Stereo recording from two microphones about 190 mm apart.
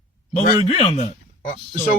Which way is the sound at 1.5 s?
45° left (ahead or behind).